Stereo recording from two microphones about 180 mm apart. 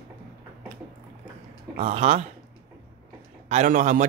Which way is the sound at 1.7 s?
35° right (ahead or behind).